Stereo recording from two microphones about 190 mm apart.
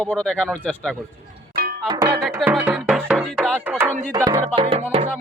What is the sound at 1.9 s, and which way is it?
Music, 20° right (ahead or behind).